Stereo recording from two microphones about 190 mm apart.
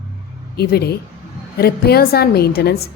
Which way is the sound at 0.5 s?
55° left (ahead or behind).